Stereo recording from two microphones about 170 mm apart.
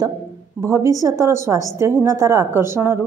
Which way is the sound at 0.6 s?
10° right (ahead or behind).